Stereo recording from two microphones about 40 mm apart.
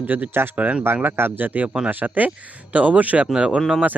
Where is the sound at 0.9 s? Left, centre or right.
Right.